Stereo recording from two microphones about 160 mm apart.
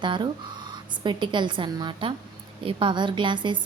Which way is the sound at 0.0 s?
30° right (ahead or behind).